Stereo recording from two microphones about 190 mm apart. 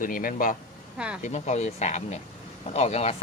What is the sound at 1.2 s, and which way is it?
Speech, 35° left (ahead or behind).